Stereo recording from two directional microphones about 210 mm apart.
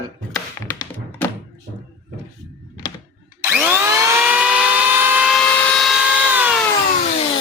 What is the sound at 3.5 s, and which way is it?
Vehicle, 10° right (ahead or behind).